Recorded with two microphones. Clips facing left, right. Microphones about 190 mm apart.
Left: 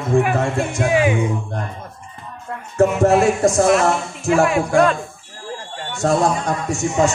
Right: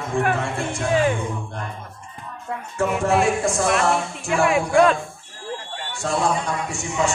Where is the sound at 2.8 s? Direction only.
40° left (ahead or behind).